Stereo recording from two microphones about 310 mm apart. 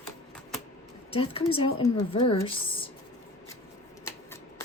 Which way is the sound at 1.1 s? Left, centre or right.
Centre.